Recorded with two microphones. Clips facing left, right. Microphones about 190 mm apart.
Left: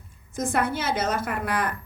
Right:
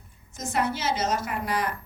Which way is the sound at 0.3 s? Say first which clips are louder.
Left 3 dB; 55° left (ahead or behind).